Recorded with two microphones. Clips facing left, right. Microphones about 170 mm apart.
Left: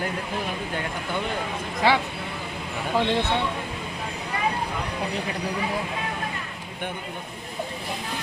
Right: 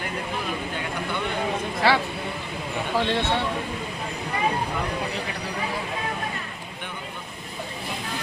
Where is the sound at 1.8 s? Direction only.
20° left (ahead or behind).